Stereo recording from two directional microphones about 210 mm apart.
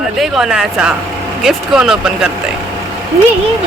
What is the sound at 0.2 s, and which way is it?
Speech, centre (ahead or behind).